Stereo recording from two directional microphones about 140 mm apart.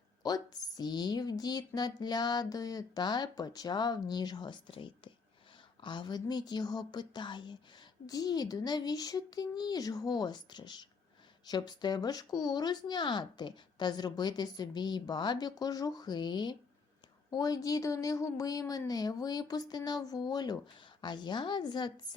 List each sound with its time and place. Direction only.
0.2 s speech: 30° left (ahead or behind)